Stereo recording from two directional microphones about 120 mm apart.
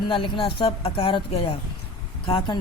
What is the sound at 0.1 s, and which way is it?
Speech, 45° left (ahead or behind).